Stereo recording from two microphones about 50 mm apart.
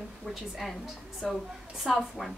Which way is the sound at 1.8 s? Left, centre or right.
Centre.